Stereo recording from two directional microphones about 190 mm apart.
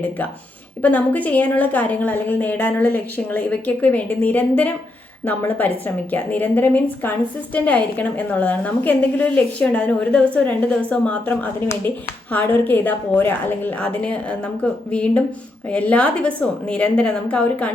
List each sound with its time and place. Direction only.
0.8 s a woman's voice: 10° left (ahead or behind)